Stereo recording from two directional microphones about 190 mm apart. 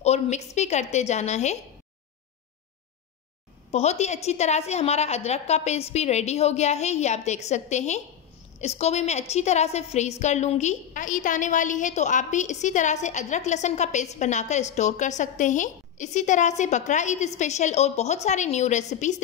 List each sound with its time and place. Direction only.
0.0 s a woman's voice: 35° left (ahead or behind)
3.7 s a woman's voice: 35° left (ahead or behind)